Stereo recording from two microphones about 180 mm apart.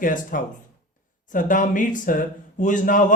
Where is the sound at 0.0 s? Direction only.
50° left (ahead or behind).